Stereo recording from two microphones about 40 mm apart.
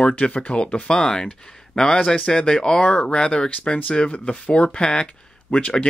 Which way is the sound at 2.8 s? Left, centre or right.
Left.